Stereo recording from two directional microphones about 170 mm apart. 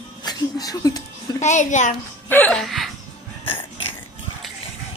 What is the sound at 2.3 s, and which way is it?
Laughter, 5° left (ahead or behind).